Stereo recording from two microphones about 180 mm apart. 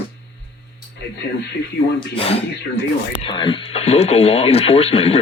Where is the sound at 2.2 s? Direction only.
30° left (ahead or behind).